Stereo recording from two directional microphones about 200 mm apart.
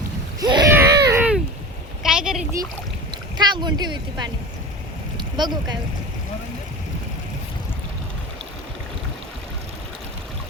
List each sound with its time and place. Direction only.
0.3 s boat: 20° right (ahead or behind)
0.7 s a sound: 10° right (ahead or behind)
3.1 s speech: 20° right (ahead or behind)
5.4 s speech: 20° right (ahead or behind)